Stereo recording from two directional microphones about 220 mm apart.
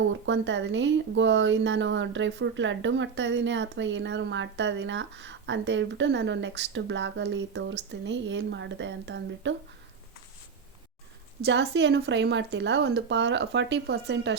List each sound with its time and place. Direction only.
0.1 s speech: 55° right (ahead or behind)
11.4 s speech: 50° right (ahead or behind)